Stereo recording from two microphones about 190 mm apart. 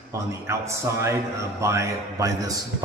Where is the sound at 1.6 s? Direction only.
15° right (ahead or behind).